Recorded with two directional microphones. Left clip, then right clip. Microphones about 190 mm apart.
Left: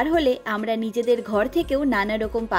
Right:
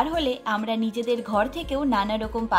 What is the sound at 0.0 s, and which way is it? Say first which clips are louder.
A woman's voice: left 4 dB; 45° left (ahead or behind).